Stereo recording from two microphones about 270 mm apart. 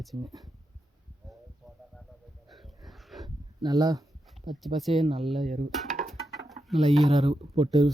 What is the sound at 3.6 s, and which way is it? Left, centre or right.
Speech, centre.